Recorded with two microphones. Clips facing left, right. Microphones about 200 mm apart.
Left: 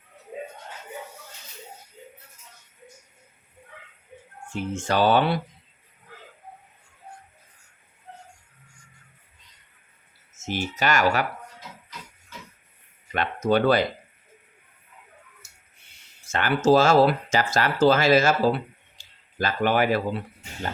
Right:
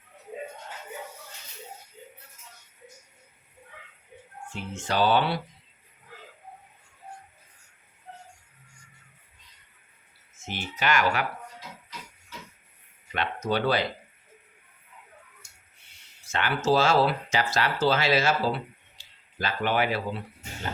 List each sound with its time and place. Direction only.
4.5 s speech: 50° left (ahead or behind)
10.3 s speech: 45° left (ahead or behind)
13.1 s speech: 50° left (ahead or behind)
15.4 s a sound: 5° left (ahead or behind)
16.2 s speech: 45° left (ahead or behind)